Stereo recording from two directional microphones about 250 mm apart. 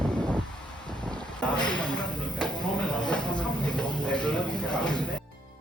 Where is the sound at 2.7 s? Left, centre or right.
Centre.